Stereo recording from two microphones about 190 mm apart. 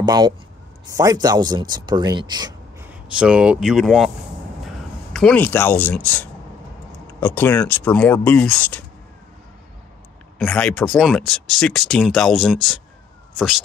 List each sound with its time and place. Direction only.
0.0 s speech: 20° right (ahead or behind)
2.8 s speech: 5° right (ahead or behind)
5.1 s speech: 5° left (ahead or behind)
10.4 s speech: 5° left (ahead or behind)